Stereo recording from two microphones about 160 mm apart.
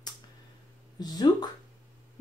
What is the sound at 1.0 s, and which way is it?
Speech, 25° left (ahead or behind).